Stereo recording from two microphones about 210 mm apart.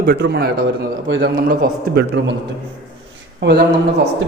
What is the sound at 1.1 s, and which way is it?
Speech, 60° right (ahead or behind).